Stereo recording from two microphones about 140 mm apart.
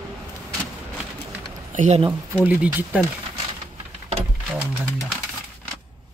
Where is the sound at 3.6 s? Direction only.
50° right (ahead or behind).